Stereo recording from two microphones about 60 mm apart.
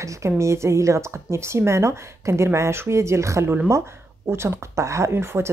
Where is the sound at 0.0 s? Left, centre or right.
Right.